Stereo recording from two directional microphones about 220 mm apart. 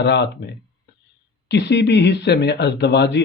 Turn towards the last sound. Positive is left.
turn(degrees=50)  # may be behind; listen again after turning